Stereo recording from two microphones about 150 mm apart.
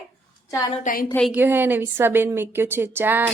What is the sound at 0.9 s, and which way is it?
Speech, 60° left (ahead or behind).